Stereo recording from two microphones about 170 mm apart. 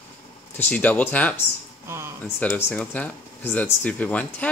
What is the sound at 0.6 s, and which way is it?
Speech, 10° left (ahead or behind).